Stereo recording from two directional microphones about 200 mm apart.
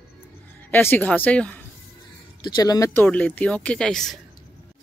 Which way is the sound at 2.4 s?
20° left (ahead or behind).